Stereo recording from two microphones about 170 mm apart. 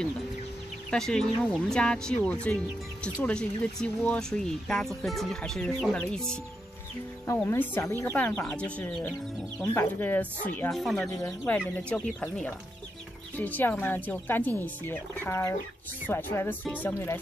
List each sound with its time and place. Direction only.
0.8 s speech: 5° left (ahead or behind)
7.4 s speech: 10° left (ahead or behind)
11.1 s speech: 20° left (ahead or behind)
11.6 s speech: 5° left (ahead or behind)